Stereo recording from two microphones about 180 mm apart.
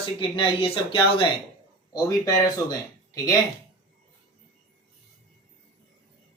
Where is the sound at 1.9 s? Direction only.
20° left (ahead or behind).